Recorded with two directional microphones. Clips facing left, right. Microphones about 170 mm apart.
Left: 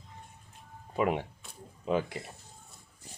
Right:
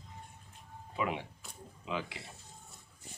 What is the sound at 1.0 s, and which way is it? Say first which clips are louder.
Speech: left 6 dB; 50° left (ahead or behind).